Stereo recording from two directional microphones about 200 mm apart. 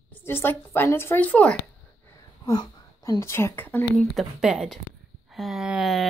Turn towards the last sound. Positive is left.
turn(degrees=0)  # may be behind; listen again after turning